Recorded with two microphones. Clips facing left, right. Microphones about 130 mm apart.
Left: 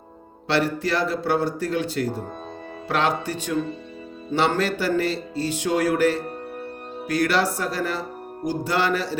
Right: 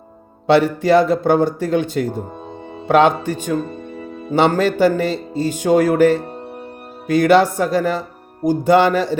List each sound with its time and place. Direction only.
0.4 s speech: 55° right (ahead or behind)
7.2 s speech: 50° right (ahead or behind)